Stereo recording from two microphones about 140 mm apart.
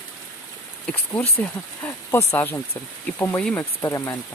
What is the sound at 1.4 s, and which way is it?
Speech, 20° left (ahead or behind).